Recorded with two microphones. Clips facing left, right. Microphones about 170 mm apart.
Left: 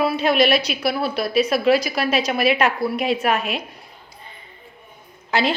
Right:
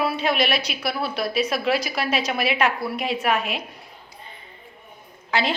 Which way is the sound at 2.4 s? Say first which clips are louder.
Left 4 dB; 40° left (ahead or behind).